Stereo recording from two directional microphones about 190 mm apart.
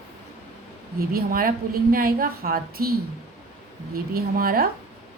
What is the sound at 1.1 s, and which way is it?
A woman's voice, 50° right (ahead or behind).